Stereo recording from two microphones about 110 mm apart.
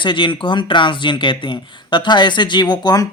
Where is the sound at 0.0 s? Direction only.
50° left (ahead or behind).